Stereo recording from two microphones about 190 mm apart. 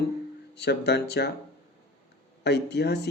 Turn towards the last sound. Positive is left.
turn(degrees=60)  # may be behind; listen again after turning